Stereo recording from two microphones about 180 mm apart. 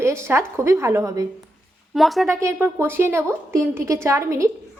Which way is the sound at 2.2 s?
15° right (ahead or behind).